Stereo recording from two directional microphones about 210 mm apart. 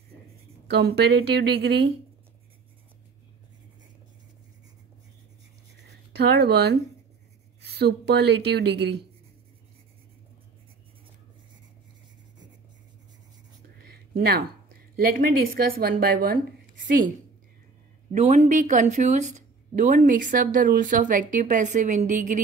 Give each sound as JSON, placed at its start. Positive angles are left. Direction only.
{"t": 0.7, "sound": "a woman's voice", "side_deg": -50}
{"t": 6.1, "sound": "a woman's voice", "side_deg": -50}
{"t": 7.8, "sound": "a woman's voice", "side_deg": -50}
{"t": 13.8, "sound": "a sound", "side_deg": -45}
{"t": 15.1, "sound": "a woman's voice", "side_deg": -45}
{"t": 18.1, "sound": "speech", "side_deg": -30}